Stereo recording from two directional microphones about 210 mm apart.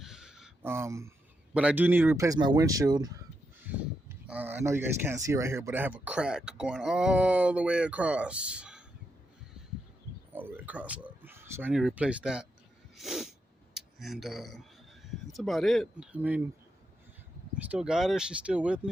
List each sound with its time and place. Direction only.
0.0 s a sound: centre (ahead or behind)
1.5 s speech: 5° right (ahead or behind)
4.3 s speech: 10° right (ahead or behind)
10.3 s speech: 5° right (ahead or behind)
13.0 s sneeze: centre (ahead or behind)
13.7 s speech: centre (ahead or behind)
17.6 s speech: 5° right (ahead or behind)